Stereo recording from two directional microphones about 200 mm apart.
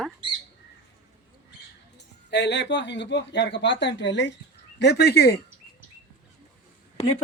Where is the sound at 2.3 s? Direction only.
60° left (ahead or behind).